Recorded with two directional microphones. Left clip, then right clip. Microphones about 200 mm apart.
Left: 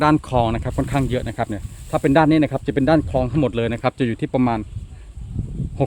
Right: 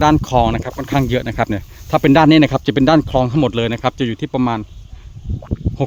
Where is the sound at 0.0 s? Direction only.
15° right (ahead or behind).